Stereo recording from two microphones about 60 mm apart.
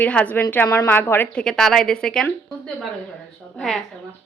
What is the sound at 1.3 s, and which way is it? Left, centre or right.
Speech, centre.